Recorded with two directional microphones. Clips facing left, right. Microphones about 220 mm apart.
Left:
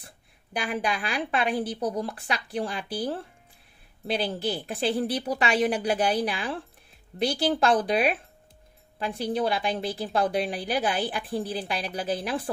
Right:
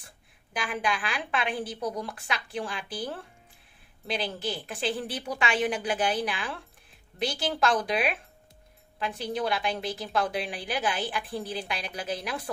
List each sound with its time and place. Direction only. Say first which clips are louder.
0.0 s a woman's voice: left 4 dB; 35° left (ahead or behind)